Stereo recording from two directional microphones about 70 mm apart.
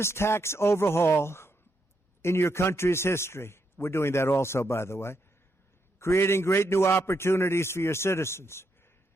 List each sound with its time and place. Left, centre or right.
0.0 s a man's voice: left